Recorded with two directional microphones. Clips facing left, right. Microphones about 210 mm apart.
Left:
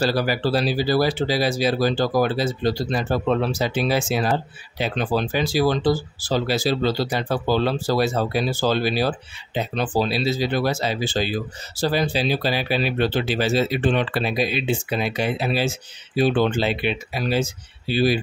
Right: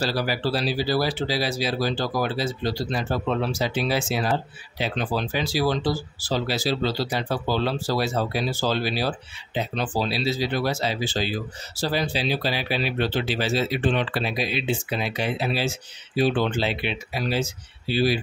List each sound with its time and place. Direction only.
0.0 s speech: 50° left (ahead or behind)